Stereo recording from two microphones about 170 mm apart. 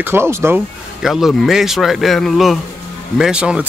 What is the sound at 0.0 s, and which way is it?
Speech, 15° right (ahead or behind).